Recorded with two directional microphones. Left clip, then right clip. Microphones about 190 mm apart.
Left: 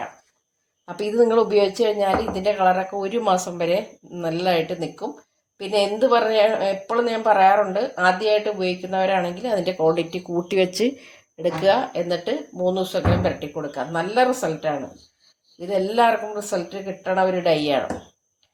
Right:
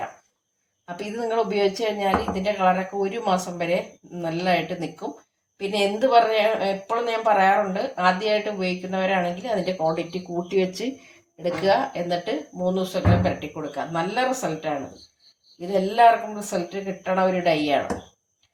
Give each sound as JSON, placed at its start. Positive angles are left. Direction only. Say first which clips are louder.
{"t": 0.9, "sound": "a woman's voice", "louder": "left 7 dB", "side_deg": 45}
{"t": 16.0, "sound": "speech", "louder": "right 3 dB", "side_deg": 40}